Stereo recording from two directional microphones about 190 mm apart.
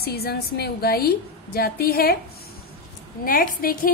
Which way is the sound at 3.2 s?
50° left (ahead or behind).